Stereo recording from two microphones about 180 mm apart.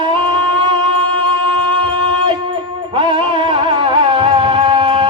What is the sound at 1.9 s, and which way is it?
Music, 25° right (ahead or behind).